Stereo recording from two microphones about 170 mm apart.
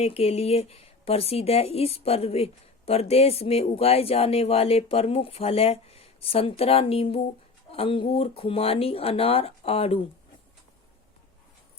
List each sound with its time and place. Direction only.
0.0 s speech: 35° left (ahead or behind)